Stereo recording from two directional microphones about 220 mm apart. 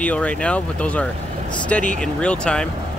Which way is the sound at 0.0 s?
5° left (ahead or behind).